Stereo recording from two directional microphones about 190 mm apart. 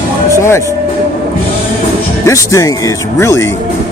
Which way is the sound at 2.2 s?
15° left (ahead or behind).